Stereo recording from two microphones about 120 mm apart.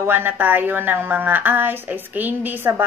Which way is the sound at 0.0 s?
15° right (ahead or behind).